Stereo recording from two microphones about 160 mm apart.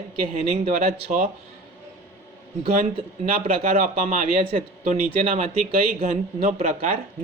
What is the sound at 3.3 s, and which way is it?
Speech, 40° right (ahead or behind).